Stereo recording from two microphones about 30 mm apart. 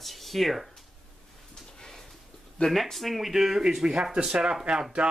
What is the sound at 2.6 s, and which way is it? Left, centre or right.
Speech, centre.